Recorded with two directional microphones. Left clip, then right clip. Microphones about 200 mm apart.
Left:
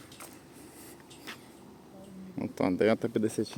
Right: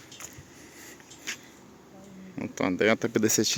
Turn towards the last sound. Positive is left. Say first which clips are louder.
# right 6 dB
turn(degrees=-15)  # may be behind; listen again after turning